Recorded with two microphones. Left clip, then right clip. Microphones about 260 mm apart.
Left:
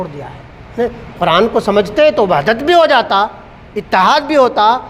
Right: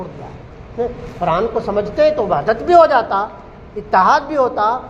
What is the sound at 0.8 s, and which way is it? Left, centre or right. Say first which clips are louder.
A man's voice: left 4 dB; left.